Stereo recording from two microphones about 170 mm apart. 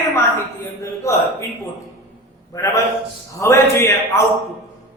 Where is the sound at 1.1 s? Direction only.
15° left (ahead or behind).